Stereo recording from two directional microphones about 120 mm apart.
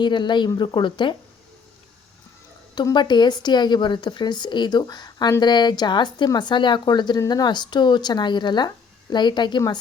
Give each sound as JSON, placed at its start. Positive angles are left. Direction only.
{"t": 0.0, "sound": "speech", "side_deg": 40}
{"t": 2.7, "sound": "speech", "side_deg": 40}